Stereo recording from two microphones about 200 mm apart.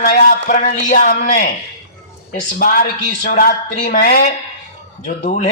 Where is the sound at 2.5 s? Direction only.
45° left (ahead or behind).